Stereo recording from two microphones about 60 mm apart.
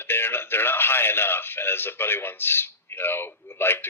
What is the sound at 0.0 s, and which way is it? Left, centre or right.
A man's voice, left.